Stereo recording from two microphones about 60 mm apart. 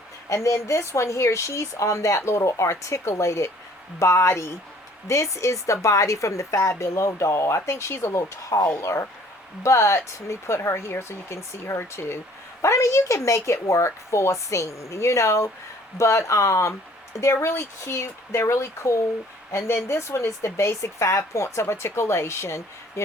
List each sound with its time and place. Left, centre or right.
0.3 s speech: left